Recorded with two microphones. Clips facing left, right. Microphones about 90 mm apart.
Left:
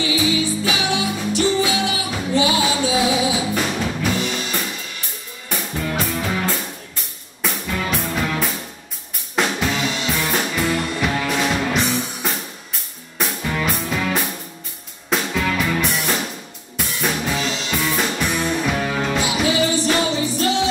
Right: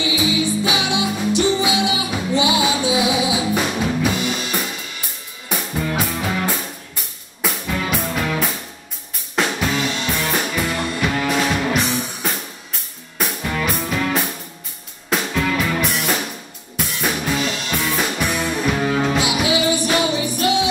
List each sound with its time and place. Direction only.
0.0 s music: 15° right (ahead or behind)